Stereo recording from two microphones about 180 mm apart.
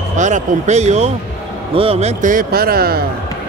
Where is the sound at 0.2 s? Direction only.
40° right (ahead or behind).